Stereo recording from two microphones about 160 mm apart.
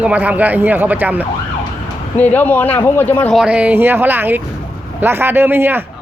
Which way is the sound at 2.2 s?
10° left (ahead or behind).